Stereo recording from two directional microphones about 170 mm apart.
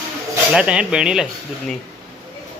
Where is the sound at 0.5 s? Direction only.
5° right (ahead or behind).